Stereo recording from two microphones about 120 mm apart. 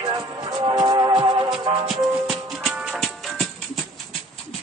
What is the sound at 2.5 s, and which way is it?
Music, 5° right (ahead or behind).